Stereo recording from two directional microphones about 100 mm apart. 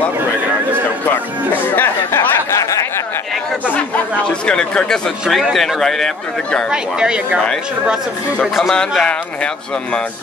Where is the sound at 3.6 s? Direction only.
15° left (ahead or behind).